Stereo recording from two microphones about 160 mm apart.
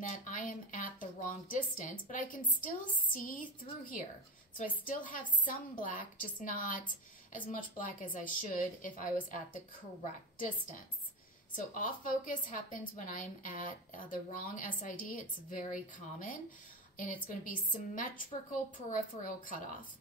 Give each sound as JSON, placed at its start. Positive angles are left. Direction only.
{"t": 0.2, "sound": "a woman's voice", "side_deg": 55}
{"t": 11.5, "sound": "a woman's voice", "side_deg": 55}